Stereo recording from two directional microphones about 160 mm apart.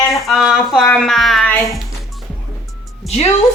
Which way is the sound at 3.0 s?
40° left (ahead or behind).